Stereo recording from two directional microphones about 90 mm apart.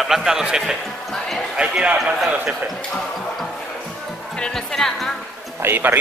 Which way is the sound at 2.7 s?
5° left (ahead or behind).